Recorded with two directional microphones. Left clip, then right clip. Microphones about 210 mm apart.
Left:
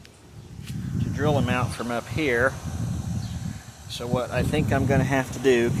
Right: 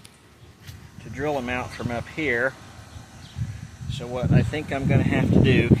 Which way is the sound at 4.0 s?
15° left (ahead or behind).